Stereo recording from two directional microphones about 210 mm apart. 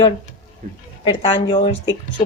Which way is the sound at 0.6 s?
40° right (ahead or behind).